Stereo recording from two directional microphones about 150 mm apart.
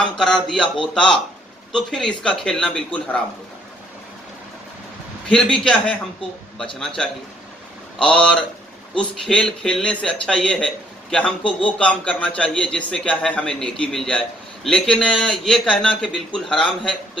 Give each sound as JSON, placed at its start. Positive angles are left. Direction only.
{"t": 0.2, "sound": "speech", "side_deg": 5}
{"t": 5.3, "sound": "speech", "side_deg": 5}
{"t": 8.0, "sound": "speech", "side_deg": 5}